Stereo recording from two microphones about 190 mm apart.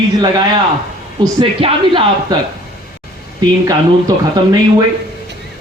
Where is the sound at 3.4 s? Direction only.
20° right (ahead or behind).